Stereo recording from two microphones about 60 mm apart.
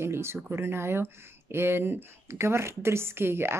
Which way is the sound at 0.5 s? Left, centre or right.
Right.